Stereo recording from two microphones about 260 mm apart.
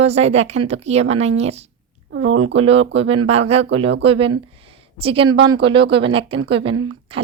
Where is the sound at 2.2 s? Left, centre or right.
Right.